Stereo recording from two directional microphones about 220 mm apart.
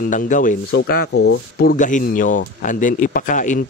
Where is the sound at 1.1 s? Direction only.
75° left (ahead or behind).